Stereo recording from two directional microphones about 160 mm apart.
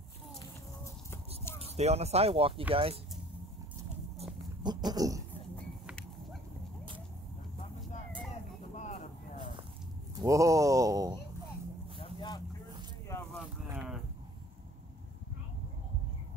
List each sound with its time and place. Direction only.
1.1 s a sound: 15° left (ahead or behind)
1.6 s speech: 40° right (ahead or behind)
4.6 s speech: 25° right (ahead or behind)
10.1 s speech: 20° right (ahead or behind)
12.0 s vehicle: 25° left (ahead or behind)
13.7 s a sound: 5° right (ahead or behind)